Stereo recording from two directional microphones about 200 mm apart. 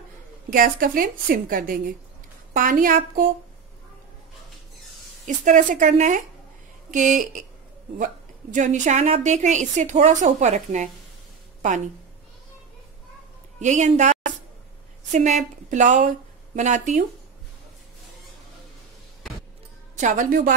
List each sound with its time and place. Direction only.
0.5 s a woman's voice: 45° right (ahead or behind)
5.2 s a woman's voice: 40° right (ahead or behind)
8.5 s a woman's voice: 40° right (ahead or behind)
13.6 s a woman's voice: 35° right (ahead or behind)
20.0 s a woman's voice: 40° right (ahead or behind)